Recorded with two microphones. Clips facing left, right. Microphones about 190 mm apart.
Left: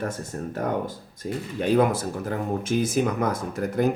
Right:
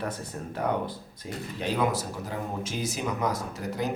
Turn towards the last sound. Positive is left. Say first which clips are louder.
# left 7 dB
turn(degrees=55)  # may be behind; listen again after turning